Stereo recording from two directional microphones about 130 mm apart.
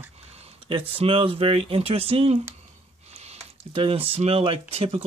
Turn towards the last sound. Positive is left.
turn(degrees=-50)  # may be behind; listen again after turning